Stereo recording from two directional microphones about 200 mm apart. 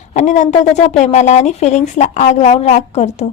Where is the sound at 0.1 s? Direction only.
35° left (ahead or behind).